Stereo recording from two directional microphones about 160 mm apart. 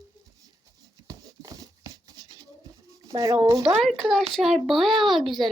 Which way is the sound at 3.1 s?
25° right (ahead or behind).